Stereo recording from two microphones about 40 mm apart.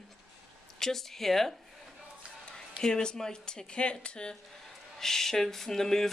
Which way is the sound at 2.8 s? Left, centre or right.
Centre.